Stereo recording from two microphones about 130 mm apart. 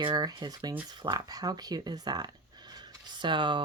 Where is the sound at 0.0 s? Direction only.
35° right (ahead or behind).